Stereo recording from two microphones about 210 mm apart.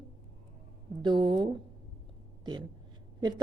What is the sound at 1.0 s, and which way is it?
A woman's voice, 20° right (ahead or behind).